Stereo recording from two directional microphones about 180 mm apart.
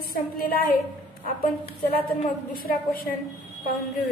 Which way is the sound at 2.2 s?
55° left (ahead or behind).